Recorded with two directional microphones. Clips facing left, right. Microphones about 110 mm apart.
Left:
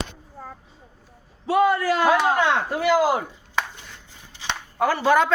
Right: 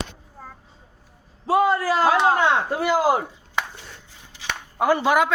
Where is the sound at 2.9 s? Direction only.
25° right (ahead or behind).